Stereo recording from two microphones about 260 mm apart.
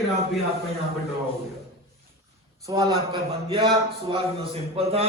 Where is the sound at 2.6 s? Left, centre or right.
Centre.